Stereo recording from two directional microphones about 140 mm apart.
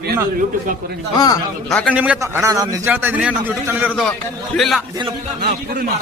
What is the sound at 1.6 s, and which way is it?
Speech, 5° left (ahead or behind).